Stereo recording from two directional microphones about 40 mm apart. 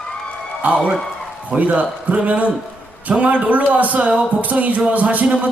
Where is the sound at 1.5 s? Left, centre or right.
Right.